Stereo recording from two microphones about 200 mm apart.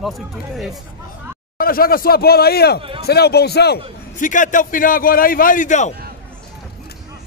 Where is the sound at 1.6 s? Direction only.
45° left (ahead or behind).